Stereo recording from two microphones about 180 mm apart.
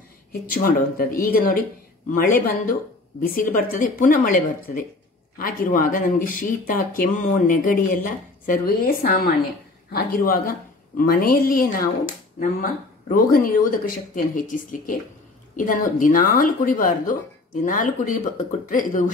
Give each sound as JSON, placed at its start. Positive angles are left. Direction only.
{"t": 0.3, "sound": "a man's voice", "side_deg": 55}
{"t": 13.1, "sound": "speech", "side_deg": 50}